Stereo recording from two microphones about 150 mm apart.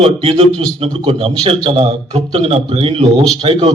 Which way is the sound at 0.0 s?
40° right (ahead or behind).